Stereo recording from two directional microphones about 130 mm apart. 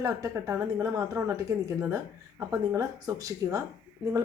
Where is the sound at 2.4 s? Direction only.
25° right (ahead or behind).